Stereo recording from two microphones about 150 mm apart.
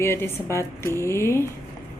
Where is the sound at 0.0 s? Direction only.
15° left (ahead or behind).